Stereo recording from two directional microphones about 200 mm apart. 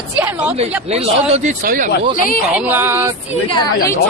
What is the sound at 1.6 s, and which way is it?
Speech, 45° right (ahead or behind).